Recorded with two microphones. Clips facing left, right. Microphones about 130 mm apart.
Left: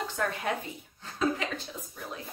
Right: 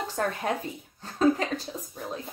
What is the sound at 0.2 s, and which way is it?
Speech, 45° right (ahead or behind).